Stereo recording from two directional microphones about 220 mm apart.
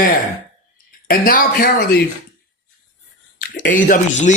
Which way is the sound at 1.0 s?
40° left (ahead or behind).